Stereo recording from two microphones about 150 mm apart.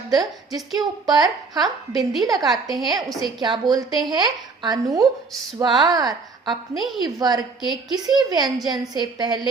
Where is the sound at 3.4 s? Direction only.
30° right (ahead or behind).